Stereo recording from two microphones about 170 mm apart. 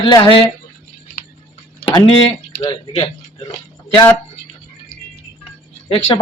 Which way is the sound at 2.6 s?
30° left (ahead or behind).